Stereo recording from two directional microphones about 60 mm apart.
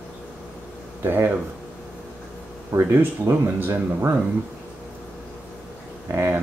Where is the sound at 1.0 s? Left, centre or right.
Right.